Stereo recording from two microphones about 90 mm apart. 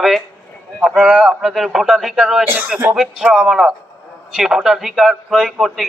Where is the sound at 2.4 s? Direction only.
25° right (ahead or behind).